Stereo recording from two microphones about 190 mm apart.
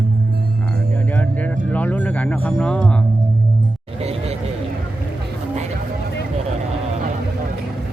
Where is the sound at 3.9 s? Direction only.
30° right (ahead or behind).